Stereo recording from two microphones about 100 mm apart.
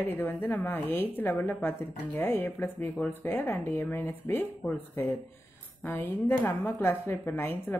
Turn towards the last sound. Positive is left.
turn(degrees=20)  # may be behind; listen again after turning